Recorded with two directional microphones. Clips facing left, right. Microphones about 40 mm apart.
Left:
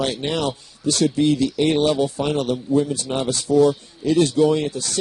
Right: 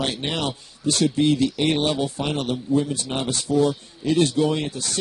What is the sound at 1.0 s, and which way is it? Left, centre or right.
Speech, right.